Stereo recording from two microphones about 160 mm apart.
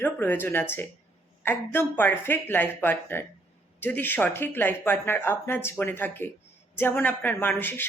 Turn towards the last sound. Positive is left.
turn(degrees=10)  # may be behind; listen again after turning